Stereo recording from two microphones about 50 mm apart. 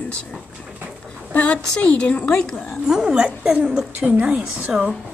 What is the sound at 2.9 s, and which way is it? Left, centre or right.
Speech, centre.